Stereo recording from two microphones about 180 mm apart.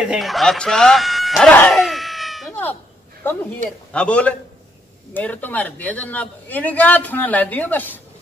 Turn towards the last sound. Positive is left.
turn(degrees=10)  # may be behind; listen again after turning